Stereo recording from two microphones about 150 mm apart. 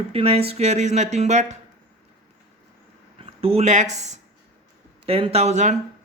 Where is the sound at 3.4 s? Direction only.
40° right (ahead or behind).